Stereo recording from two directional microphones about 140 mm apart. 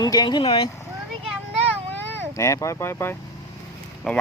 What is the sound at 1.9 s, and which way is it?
Speech, 15° left (ahead or behind).